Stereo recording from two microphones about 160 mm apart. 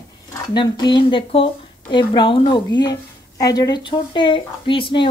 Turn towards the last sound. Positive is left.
turn(degrees=30)  # may be behind; listen again after turning